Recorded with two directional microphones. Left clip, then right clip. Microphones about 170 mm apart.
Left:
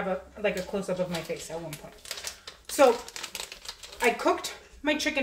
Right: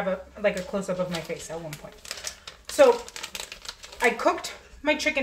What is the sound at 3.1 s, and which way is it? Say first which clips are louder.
Typewriter: right 2 dB; 15° right (ahead or behind).